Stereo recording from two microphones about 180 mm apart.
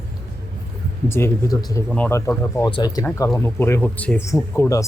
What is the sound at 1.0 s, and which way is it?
Speech, 15° left (ahead or behind).